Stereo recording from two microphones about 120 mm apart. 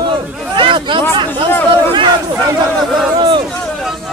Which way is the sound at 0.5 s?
45° right (ahead or behind).